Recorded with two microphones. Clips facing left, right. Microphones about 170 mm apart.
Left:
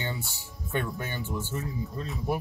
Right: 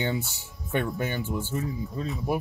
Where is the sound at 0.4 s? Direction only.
15° right (ahead or behind).